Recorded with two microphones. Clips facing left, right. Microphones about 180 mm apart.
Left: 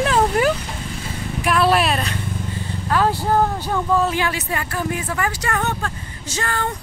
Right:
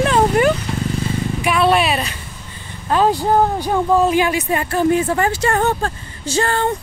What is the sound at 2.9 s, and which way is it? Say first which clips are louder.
Speech: right 4 dB; 20° right (ahead or behind).